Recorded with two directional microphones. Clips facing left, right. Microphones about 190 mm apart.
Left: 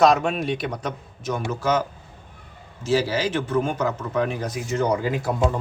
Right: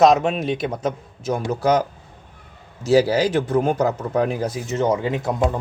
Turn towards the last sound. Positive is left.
turn(degrees=-20)  # may be behind; listen again after turning